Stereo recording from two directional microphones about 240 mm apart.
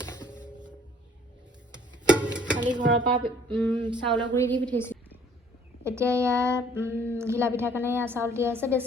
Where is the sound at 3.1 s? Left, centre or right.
Centre.